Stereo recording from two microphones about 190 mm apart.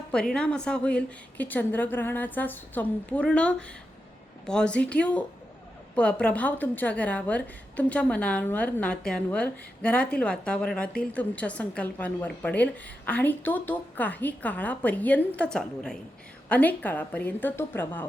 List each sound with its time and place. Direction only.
0.1 s a woman's voice: 5° left (ahead or behind)